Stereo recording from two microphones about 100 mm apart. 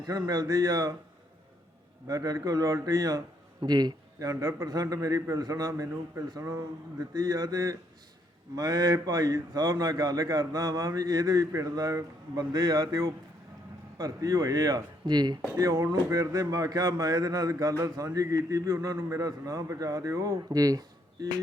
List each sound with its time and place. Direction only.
0.0 s speech: 40° right (ahead or behind)
2.0 s speech: 35° right (ahead or behind)
15.5 s speech: 35° right (ahead or behind)